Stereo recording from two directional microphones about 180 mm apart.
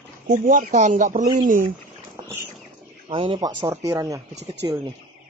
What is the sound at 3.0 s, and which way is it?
Speech, 30° right (ahead or behind).